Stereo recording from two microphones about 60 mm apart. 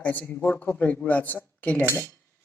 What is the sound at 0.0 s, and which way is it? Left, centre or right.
Speech, left.